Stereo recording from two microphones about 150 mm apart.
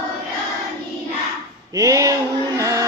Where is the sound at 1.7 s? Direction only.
25° right (ahead or behind).